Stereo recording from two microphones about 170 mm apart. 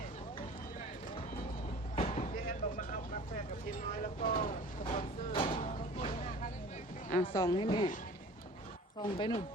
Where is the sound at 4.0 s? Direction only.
50° left (ahead or behind).